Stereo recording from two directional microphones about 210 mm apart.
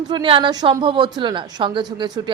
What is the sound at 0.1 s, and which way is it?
A man's voice, 25° right (ahead or behind).